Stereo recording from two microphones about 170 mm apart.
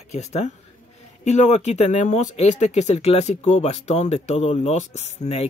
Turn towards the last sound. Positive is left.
turn(degrees=40)  # may be behind; listen again after turning